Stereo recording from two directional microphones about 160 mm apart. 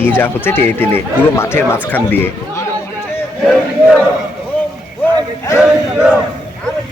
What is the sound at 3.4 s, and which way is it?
Crowd, 5° left (ahead or behind).